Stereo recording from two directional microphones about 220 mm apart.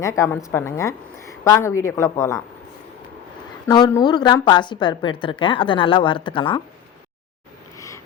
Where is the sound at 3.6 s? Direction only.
15° left (ahead or behind).